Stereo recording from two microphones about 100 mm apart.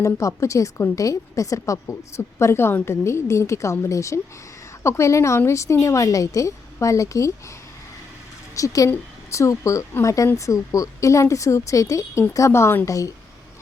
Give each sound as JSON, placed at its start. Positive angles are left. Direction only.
{"t": 0.0, "sound": "a woman's voice", "side_deg": 30}
{"t": 8.5, "sound": "a woman's voice", "side_deg": 35}